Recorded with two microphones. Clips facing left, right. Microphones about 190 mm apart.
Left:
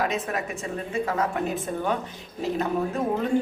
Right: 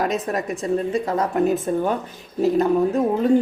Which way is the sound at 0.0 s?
40° right (ahead or behind).